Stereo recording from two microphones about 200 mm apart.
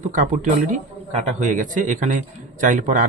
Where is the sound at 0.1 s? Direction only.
40° right (ahead or behind).